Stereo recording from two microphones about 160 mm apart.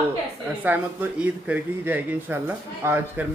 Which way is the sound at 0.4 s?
10° right (ahead or behind).